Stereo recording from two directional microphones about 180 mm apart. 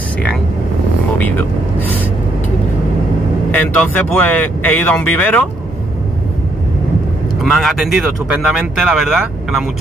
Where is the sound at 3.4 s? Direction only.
10° left (ahead or behind).